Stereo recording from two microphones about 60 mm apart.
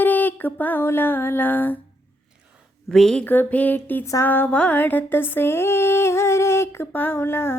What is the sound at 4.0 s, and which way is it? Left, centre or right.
Music, left.